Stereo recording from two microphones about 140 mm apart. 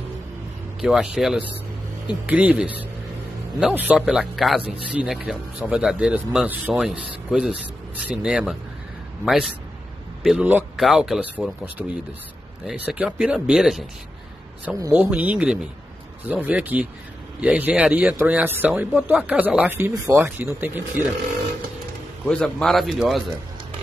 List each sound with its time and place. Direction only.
0.7 s a man's voice: 5° right (ahead or behind)
12.6 s a man's voice: 10° right (ahead or behind)
19.9 s speech: 25° right (ahead or behind)
20.2 s speech: 15° right (ahead or behind)
22.2 s a man's voice: 5° left (ahead or behind)